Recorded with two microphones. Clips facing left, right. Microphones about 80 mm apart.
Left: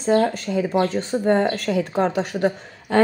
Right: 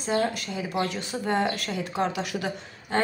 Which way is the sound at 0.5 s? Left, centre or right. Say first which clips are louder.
Left 8 dB; left.